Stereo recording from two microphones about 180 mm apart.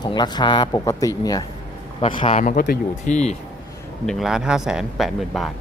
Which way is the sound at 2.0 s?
30° left (ahead or behind).